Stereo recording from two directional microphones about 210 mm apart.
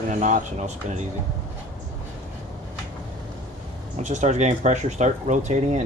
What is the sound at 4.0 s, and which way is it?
Speech, 35° right (ahead or behind).